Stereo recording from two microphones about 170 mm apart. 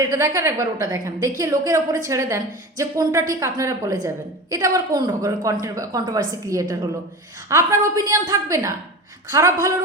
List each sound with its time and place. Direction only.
0.0 s a woman's voice: 20° right (ahead or behind)